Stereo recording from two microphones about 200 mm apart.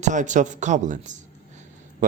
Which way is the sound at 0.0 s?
40° right (ahead or behind).